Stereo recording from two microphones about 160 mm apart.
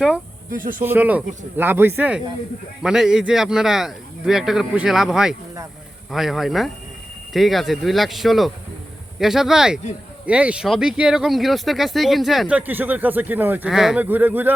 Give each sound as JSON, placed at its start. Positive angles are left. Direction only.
{"t": 0.5, "sound": "speech", "side_deg": -60}
{"t": 0.8, "sound": "a man's voice", "side_deg": -10}